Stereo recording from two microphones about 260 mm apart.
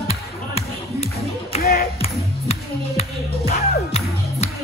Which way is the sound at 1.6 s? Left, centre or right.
Left.